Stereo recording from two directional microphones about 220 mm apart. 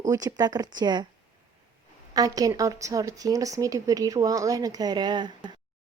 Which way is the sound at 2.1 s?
15° right (ahead or behind).